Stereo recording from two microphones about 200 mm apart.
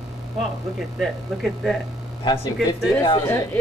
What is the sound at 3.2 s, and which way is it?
Speech, 10° left (ahead or behind).